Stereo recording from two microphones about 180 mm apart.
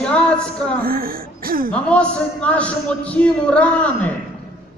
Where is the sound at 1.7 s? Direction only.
5° left (ahead or behind).